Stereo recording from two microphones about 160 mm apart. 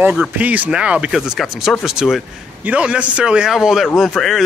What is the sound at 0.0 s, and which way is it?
Speech, 5° right (ahead or behind).